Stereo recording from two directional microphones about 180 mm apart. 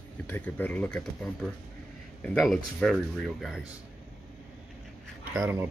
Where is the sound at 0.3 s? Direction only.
10° left (ahead or behind).